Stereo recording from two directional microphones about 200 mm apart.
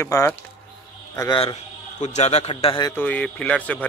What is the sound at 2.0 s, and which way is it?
Speech, 35° left (ahead or behind).